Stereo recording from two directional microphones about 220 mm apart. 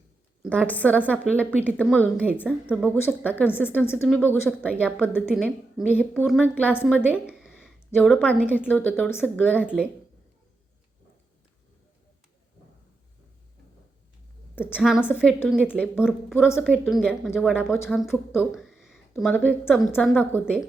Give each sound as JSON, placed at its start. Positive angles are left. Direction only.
{"t": 0.4, "sound": "a woman's voice", "side_deg": -10}
{"t": 0.7, "sound": "a woman's voice", "side_deg": 5}
{"t": 5.2, "sound": "a woman's voice", "side_deg": 0}
{"t": 6.8, "sound": "a sound", "side_deg": -5}
{"t": 7.9, "sound": "speech", "side_deg": 10}
{"t": 8.1, "sound": "a woman's voice", "side_deg": -5}
{"t": 8.4, "sound": "a woman's voice", "side_deg": 10}
{"t": 9.6, "sound": "a woman's voice", "side_deg": -5}
{"t": 14.8, "sound": "a woman's voice", "side_deg": 0}
{"t": 16.5, "sound": "a woman's voice", "side_deg": 10}
{"t": 18.3, "sound": "a sound", "side_deg": 0}
{"t": 19.6, "sound": "a woman's voice", "side_deg": 0}